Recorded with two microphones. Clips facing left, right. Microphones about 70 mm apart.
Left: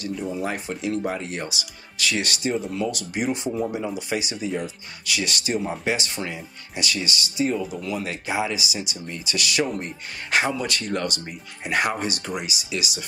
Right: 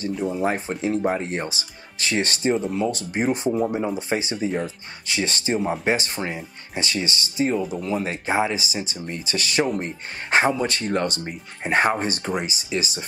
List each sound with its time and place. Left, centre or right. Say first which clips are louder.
0.1 s speech: right 3 dB; centre
0.4 s speech: right 4 dB; right
7.5 s speech: right 3 dB; centre
7.8 s speech: right 3 dB; right